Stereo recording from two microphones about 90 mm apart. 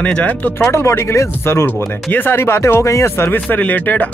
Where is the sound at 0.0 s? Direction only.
15° left (ahead or behind).